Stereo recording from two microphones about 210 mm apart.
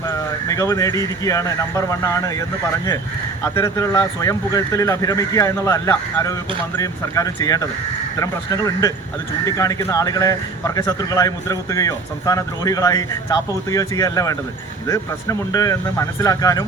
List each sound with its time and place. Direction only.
0.1 s speech: 15° left (ahead or behind)
3.4 s speech: 15° left (ahead or behind)